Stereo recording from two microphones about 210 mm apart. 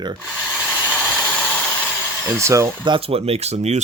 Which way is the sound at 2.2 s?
10° right (ahead or behind).